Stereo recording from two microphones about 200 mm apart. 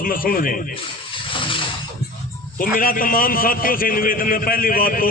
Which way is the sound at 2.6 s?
45° left (ahead or behind).